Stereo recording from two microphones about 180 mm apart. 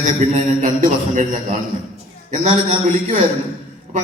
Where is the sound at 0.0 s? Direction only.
45° right (ahead or behind).